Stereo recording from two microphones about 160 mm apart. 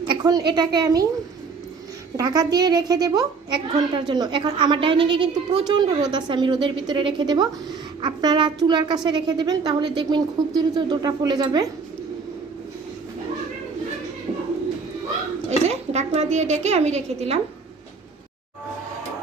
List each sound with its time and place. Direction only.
0.1 s a woman's voice: 25° right (ahead or behind)
2.1 s a woman's voice: 25° right (ahead or behind)
15.4 s speech: 40° right (ahead or behind)